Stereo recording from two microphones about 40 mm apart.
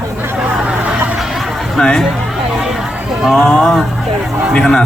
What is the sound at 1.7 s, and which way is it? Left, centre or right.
Speech, centre.